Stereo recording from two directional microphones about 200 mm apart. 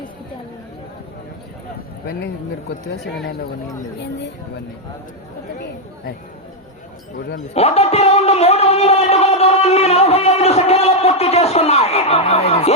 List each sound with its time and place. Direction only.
2.0 s speech: 55° left (ahead or behind)
7.5 s speech: 30° left (ahead or behind)